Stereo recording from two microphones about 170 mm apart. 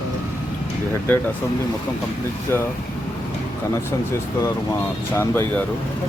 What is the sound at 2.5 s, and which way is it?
Speech, 15° left (ahead or behind).